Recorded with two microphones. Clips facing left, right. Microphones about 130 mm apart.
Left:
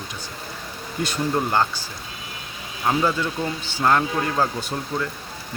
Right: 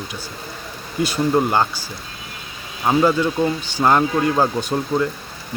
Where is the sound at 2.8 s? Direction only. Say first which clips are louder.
Right 5 dB; 20° right (ahead or behind).